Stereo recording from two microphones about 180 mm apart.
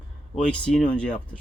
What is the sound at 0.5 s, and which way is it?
Speech, 5° left (ahead or behind).